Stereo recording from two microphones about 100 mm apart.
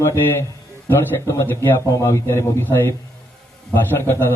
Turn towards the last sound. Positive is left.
turn(degrees=25)  # may be behind; listen again after turning